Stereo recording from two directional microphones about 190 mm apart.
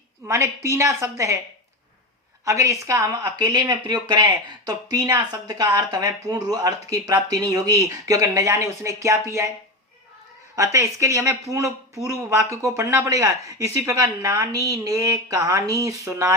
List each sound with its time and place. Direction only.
0.3 s speech: 15° right (ahead or behind)
2.4 s speech: 15° right (ahead or behind)
10.5 s speech: 15° right (ahead or behind)